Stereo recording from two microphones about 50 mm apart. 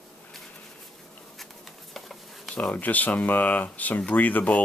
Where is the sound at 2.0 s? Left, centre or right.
Centre.